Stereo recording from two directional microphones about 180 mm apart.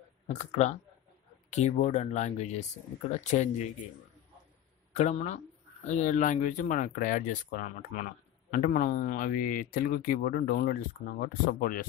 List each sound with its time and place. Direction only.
0.3 s speech: 40° left (ahead or behind)
4.9 s speech: 40° left (ahead or behind)